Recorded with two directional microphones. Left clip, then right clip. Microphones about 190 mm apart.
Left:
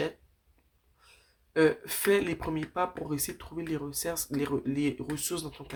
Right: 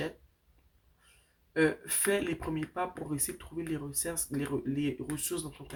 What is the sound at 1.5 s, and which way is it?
Speech, 30° left (ahead or behind).